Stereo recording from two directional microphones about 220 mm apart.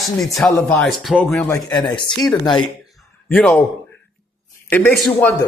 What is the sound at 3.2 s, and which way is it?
Speech, 5° left (ahead or behind).